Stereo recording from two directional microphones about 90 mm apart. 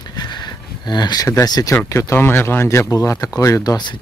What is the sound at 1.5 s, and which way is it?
Speech, 45° left (ahead or behind).